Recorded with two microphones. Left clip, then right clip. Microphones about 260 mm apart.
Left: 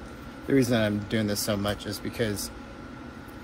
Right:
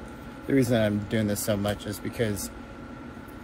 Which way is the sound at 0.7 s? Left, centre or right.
Centre.